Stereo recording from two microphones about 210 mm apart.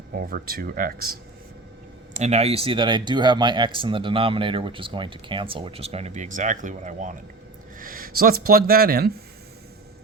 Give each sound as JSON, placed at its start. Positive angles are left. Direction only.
{"t": 0.2, "sound": "speech", "side_deg": -45}
{"t": 2.1, "sound": "speech", "side_deg": -30}